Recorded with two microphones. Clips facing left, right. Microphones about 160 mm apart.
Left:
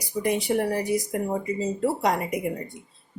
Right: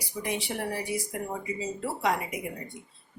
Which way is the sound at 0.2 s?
55° left (ahead or behind).